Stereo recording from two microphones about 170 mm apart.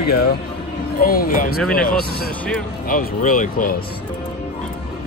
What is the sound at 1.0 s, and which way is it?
Speech, 60° left (ahead or behind).